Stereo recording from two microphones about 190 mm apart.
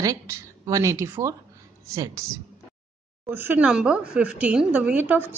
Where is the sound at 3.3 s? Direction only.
10° right (ahead or behind).